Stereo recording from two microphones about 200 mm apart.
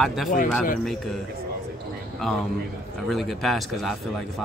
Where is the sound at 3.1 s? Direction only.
Centre (ahead or behind).